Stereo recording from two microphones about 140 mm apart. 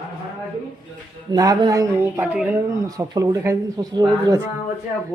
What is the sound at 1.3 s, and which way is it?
Speech, 25° right (ahead or behind).